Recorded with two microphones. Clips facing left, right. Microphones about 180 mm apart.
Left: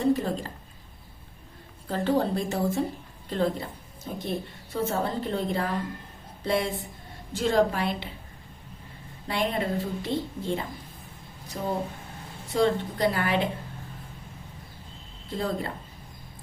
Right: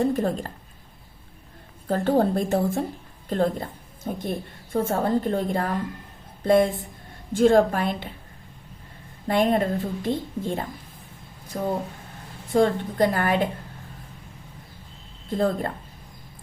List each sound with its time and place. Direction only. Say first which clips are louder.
0.0 s a woman's voice: right 2 dB; 50° right (ahead or behind)
1.9 s a woman's voice: right 4 dB; 50° right (ahead or behind)
9.2 s a woman's voice: right 7 dB; 50° right (ahead or behind)
15.3 s a woman's voice: right 6 dB; 50° right (ahead or behind)